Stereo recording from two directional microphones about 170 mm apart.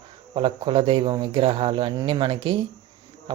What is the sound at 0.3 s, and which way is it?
Speech, 30° right (ahead or behind).